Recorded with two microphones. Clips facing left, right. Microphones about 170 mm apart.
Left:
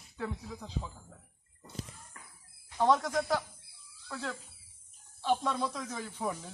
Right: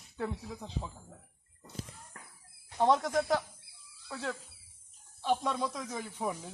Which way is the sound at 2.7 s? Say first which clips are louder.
Even; 25° right (ahead or behind).